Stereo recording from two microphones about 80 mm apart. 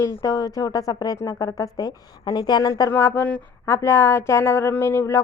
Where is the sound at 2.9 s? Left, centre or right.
Left.